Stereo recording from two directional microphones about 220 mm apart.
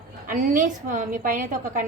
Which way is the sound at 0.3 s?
35° right (ahead or behind).